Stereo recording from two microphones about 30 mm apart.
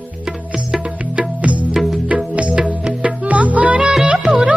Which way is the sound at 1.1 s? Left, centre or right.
Right.